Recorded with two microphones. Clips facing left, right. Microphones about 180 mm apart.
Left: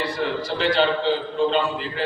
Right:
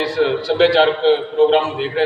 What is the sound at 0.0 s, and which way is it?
A man's voice, 85° right.